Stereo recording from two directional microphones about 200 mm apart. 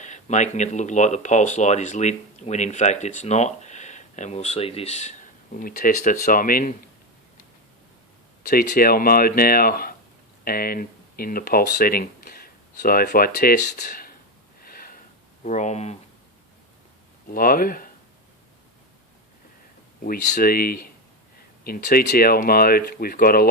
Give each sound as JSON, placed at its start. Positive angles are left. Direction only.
{"t": 0.0, "sound": "speech", "side_deg": 35}
{"t": 8.4, "sound": "speech", "side_deg": 45}
{"t": 14.6, "sound": "a sound", "side_deg": 45}
{"t": 15.4, "sound": "speech", "side_deg": 35}
{"t": 17.2, "sound": "speech", "side_deg": 45}
{"t": 20.1, "sound": "speech", "side_deg": 45}